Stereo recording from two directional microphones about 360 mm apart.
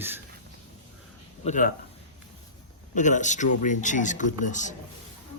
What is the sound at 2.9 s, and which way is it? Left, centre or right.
Speech, centre.